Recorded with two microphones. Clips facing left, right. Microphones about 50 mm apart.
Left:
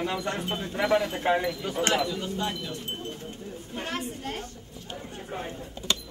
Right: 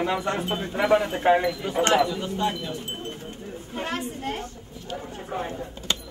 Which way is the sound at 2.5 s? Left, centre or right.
Centre.